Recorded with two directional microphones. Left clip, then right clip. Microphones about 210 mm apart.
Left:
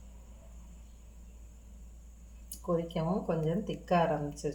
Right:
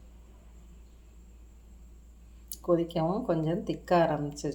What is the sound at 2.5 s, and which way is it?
Speech, 45° right (ahead or behind).